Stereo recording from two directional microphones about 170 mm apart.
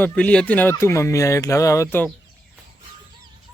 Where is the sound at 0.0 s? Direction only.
5° left (ahead or behind).